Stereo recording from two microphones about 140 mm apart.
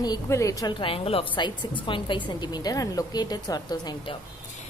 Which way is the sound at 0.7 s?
40° left (ahead or behind).